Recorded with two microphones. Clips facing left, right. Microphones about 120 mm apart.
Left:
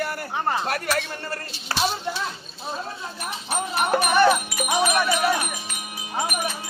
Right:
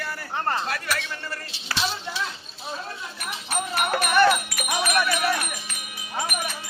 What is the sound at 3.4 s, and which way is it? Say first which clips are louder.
Music: left 3 dB; 20° left (ahead or behind).